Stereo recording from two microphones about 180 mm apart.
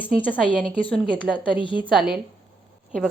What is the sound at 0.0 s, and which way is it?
Speech, 10° left (ahead or behind).